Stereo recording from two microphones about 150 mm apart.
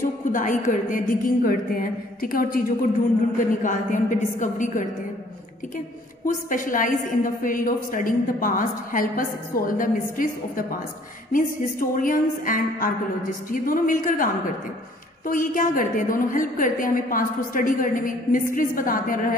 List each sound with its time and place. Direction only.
0.0 s a woman's voice: 60° left (ahead or behind)
6.2 s a woman's voice: 60° left (ahead or behind)